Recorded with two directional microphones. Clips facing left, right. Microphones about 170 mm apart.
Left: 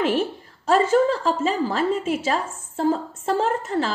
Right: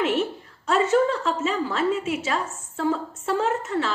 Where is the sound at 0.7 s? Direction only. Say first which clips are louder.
Left 2 dB; 30° left (ahead or behind).